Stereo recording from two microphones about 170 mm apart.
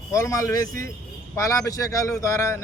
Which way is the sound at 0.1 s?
20° left (ahead or behind).